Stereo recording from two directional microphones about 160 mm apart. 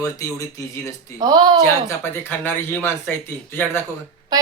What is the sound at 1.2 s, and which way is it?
Speech, 25° right (ahead or behind).